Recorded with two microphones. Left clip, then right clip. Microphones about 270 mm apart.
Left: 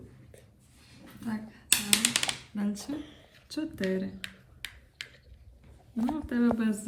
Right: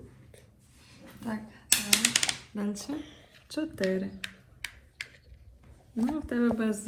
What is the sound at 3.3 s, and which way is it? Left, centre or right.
Speech, centre.